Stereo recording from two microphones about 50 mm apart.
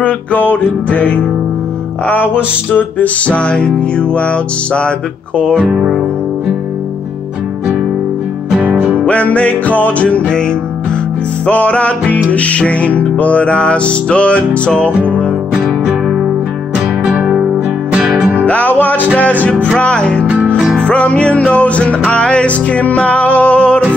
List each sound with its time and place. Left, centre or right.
0.0 s music: left
2.0 s music: left
3.3 s music: left
5.4 s speech: centre
5.7 s music: centre
9.0 s music: left
11.4 s music: left
14.9 s music: right
18.4 s music: left